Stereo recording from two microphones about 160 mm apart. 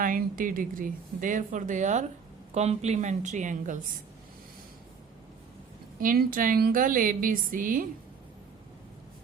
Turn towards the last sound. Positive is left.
turn(degrees=-60)  # may be behind; listen again after turning